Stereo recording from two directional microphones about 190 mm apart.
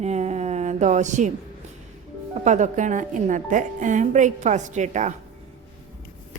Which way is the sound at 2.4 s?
40° right (ahead or behind).